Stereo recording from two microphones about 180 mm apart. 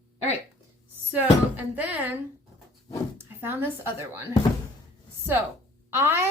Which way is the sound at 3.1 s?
10° right (ahead or behind).